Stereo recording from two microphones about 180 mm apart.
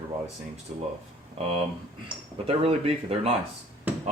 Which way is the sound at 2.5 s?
35° right (ahead or behind).